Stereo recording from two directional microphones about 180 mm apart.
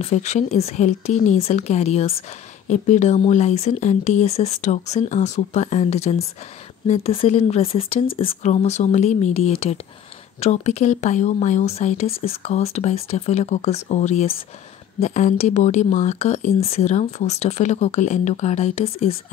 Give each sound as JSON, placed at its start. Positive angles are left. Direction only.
{"t": 0.0, "sound": "speech", "side_deg": 40}